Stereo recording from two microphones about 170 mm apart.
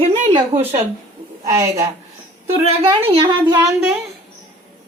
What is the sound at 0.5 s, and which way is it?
Speech, 40° right (ahead or behind).